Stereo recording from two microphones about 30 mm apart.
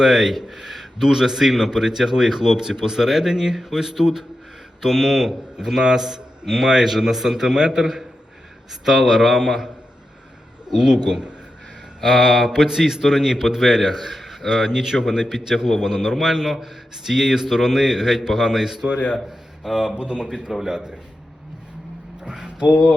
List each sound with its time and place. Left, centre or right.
0.0 s a man's voice: centre
0.4 s a sound: centre
1.2 s a man's voice: centre
6.4 s a man's voice: centre
10.7 s a man's voice: centre
10.9 s a man's voice: right
12.0 s a man's voice: centre
14.5 s a man's voice: centre
20.0 s speech: right
20.5 s a man's voice: centre
22.2 s a sound: right